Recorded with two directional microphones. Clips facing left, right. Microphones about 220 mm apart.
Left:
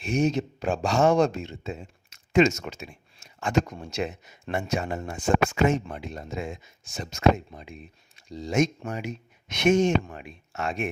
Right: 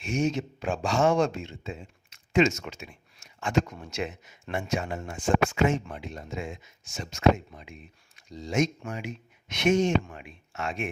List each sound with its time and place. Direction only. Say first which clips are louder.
0.0 s speech: left 3 dB; 35° left (ahead or behind)